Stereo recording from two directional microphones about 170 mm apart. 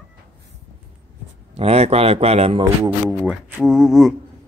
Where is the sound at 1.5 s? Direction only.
35° right (ahead or behind).